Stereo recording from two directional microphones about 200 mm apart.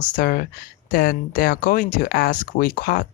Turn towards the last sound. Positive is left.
turn(degrees=45)  # may be behind; listen again after turning